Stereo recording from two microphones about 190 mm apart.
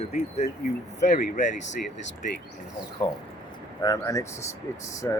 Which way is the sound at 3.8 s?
20° left (ahead or behind).